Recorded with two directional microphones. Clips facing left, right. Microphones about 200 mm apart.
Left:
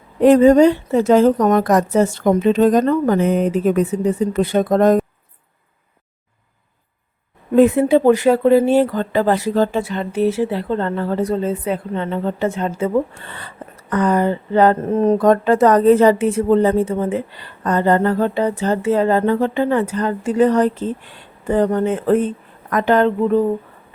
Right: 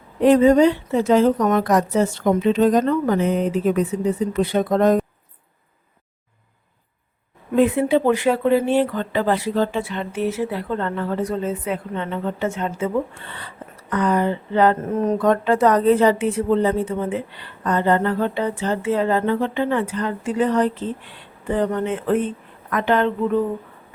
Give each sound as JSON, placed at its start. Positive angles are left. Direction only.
{"t": 0.2, "sound": "a woman's voice", "side_deg": 45}
{"t": 7.5, "sound": "speech", "side_deg": 45}